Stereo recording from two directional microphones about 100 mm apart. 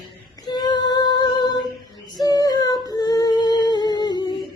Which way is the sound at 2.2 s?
40° left (ahead or behind).